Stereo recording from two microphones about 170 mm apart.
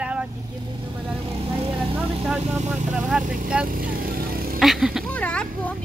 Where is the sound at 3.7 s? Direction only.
55° right (ahead or behind).